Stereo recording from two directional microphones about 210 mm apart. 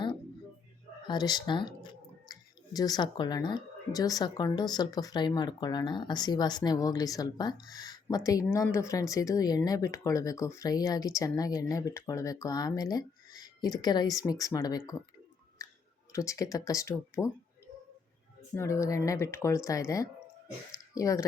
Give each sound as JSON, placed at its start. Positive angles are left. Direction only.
{"t": 1.0, "sound": "speech", "side_deg": 20}
{"t": 16.1, "sound": "speech", "side_deg": 15}
{"t": 18.5, "sound": "speech", "side_deg": 15}